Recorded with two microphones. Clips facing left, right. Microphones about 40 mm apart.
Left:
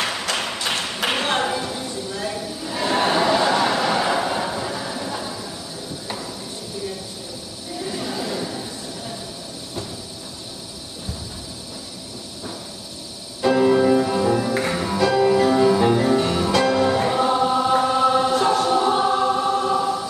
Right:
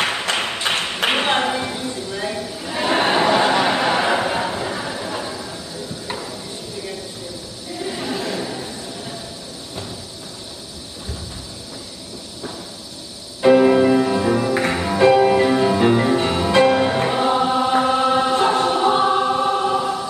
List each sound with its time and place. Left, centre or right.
0.0 s clapping: right
7.8 s neigh: right
13.4 s music: right